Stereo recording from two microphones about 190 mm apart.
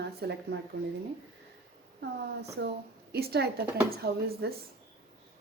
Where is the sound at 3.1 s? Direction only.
55° right (ahead or behind).